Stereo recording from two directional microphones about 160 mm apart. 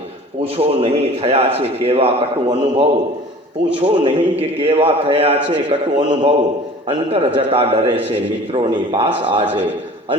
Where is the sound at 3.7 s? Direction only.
35° right (ahead or behind).